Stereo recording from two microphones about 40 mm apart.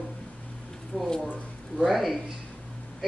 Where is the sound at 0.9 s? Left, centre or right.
Left.